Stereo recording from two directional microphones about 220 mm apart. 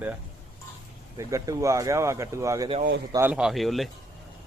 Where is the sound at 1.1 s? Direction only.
15° right (ahead or behind).